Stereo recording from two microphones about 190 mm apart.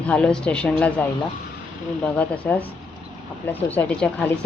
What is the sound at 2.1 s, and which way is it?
Speech, 10° left (ahead or behind).